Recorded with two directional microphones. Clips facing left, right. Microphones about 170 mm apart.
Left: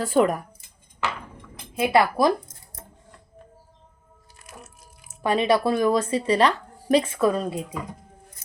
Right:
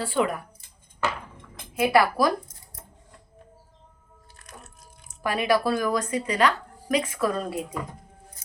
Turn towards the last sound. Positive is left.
turn(degrees=20)  # may be behind; listen again after turning